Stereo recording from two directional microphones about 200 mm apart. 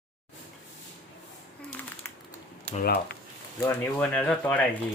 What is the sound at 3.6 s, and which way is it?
Speech, 10° left (ahead or behind).